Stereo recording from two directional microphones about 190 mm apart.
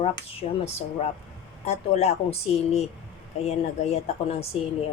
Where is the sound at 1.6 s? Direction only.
35° left (ahead or behind).